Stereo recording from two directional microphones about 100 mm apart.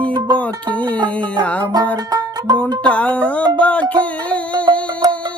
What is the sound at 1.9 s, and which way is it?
Music, 45° right (ahead or behind).